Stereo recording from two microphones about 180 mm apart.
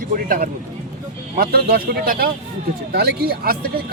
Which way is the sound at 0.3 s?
50° right (ahead or behind).